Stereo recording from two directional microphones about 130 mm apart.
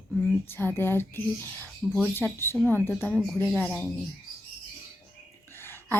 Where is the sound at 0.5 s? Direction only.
15° left (ahead or behind).